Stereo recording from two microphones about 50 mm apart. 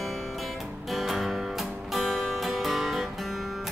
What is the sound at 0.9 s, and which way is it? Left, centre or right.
Music, centre.